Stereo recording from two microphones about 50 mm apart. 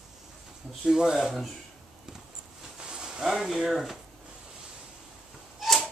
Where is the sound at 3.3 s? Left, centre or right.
Centre.